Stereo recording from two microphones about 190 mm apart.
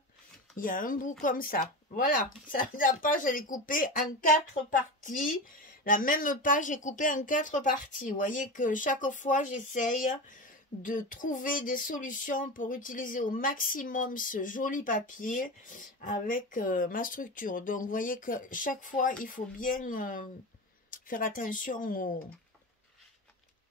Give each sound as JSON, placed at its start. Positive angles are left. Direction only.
{"t": 0.6, "sound": "speech", "side_deg": 45}